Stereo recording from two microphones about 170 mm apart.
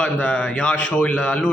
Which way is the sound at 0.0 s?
5° left (ahead or behind).